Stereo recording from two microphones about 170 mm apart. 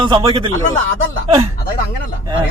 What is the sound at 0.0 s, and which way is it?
Speech, 30° right (ahead or behind).